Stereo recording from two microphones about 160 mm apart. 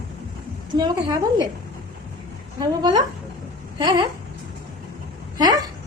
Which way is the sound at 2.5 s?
25° right (ahead or behind).